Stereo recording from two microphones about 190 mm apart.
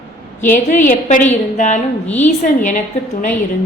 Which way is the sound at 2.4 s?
40° left (ahead or behind).